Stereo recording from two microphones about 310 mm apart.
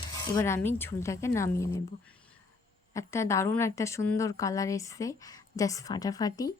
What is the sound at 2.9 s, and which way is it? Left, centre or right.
A woman's voice, centre.